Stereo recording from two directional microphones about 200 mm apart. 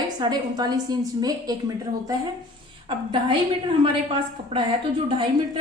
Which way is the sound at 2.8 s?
25° right (ahead or behind).